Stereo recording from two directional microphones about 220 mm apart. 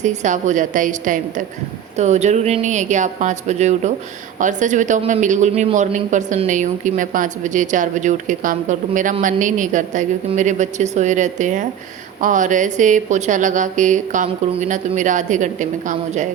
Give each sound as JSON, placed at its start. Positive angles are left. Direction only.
{"t": 0.0, "sound": "a man's voice", "side_deg": -35}